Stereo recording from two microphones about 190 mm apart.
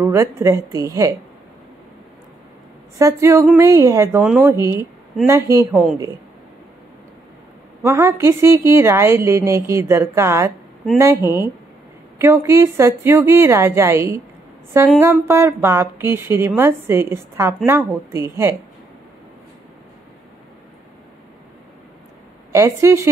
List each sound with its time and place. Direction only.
0.0 s a woman's voice: 15° right (ahead or behind)
3.0 s a woman's voice: 15° right (ahead or behind)
5.7 s a woman's voice: 5° right (ahead or behind)
7.8 s a woman's voice: 15° right (ahead or behind)
22.5 s a woman's voice: 15° right (ahead or behind)